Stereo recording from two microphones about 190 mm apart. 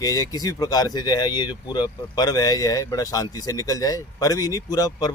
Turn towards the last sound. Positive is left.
turn(degrees=20)  # may be behind; listen again after turning